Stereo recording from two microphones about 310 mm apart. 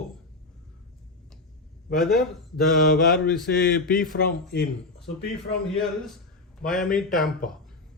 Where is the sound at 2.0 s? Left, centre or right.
Centre.